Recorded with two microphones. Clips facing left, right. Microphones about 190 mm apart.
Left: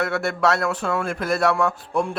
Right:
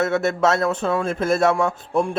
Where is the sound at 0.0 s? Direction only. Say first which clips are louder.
Right 3 dB; 20° right (ahead or behind).